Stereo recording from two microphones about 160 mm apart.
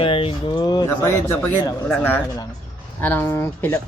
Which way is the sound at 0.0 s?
35° left (ahead or behind).